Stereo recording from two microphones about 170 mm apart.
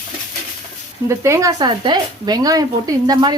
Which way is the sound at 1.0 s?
15° right (ahead or behind).